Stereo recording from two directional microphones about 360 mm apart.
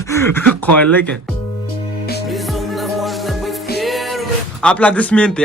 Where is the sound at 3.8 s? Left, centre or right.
Centre.